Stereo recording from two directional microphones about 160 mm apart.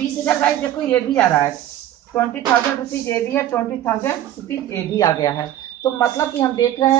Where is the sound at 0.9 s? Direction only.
15° left (ahead or behind).